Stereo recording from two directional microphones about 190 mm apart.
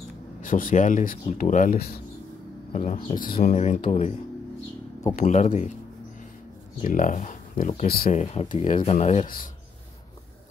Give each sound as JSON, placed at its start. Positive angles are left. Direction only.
{"t": 0.4, "sound": "speech", "side_deg": 45}
{"t": 2.7, "sound": "speech", "side_deg": 40}
{"t": 5.1, "sound": "speech", "side_deg": 40}
{"t": 6.8, "sound": "speech", "side_deg": 45}